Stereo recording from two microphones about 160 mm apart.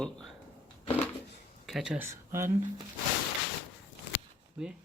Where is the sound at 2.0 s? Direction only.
15° right (ahead or behind).